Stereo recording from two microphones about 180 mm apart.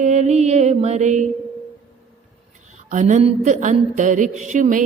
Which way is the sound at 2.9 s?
45° right (ahead or behind).